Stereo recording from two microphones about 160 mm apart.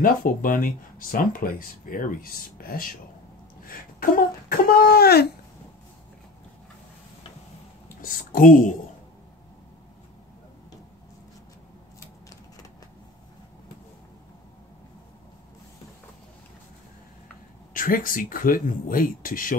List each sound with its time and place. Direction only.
0.0 s speech: 60° left (ahead or behind); by 5.3 s 75° left (ahead or behind)
8.0 s speech: 60° left (ahead or behind)
17.7 s speech: 60° left (ahead or behind)